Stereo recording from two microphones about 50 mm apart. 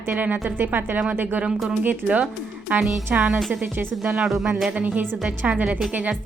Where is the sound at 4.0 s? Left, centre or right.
Centre.